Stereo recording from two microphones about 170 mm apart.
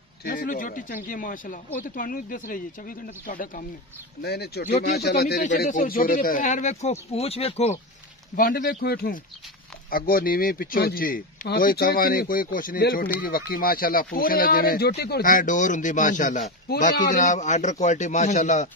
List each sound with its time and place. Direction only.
0.2 s speech: 55° left (ahead or behind)
4.2 s speech: 70° left (ahead or behind)
5.4 s speech: 50° left (ahead or behind)
8.4 s speech: 55° left (ahead or behind)
16.6 s speech: 60° left (ahead or behind)
17.1 s speech: 45° left (ahead or behind)